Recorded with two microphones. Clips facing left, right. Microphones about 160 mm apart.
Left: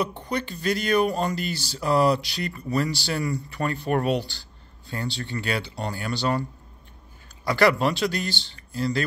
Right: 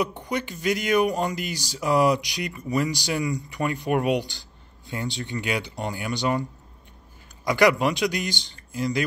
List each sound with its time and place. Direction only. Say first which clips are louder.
0.2 s speech: even; 15° right (ahead or behind)
7.4 s speech: right 1 dB; 15° right (ahead or behind)